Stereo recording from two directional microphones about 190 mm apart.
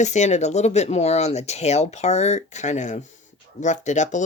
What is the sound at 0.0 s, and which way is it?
Speech, 35° left (ahead or behind).